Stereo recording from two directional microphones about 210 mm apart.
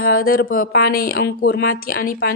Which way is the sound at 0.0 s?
45° left (ahead or behind).